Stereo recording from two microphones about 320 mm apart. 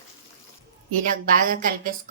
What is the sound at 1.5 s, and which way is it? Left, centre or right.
Speech, right.